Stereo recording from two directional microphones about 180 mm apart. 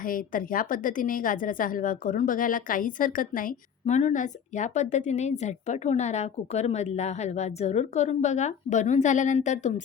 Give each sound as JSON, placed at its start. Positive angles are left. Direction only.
{"t": 0.0, "sound": "a woman's voice", "side_deg": 50}